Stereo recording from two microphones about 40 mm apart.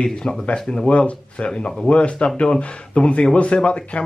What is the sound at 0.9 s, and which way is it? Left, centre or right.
Speech, left.